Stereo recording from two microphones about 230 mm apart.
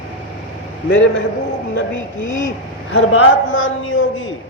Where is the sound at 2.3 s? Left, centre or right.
Left.